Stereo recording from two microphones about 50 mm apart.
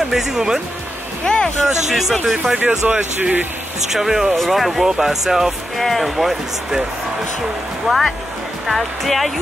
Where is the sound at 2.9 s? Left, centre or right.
Right.